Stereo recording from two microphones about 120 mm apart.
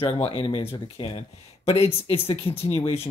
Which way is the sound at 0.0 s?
50° left (ahead or behind).